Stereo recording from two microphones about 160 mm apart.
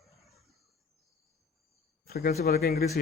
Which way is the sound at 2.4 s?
75° left (ahead or behind).